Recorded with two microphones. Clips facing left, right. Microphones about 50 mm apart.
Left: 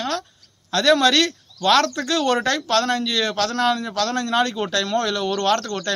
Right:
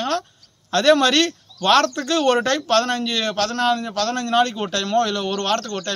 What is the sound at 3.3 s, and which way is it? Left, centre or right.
A man's voice, centre.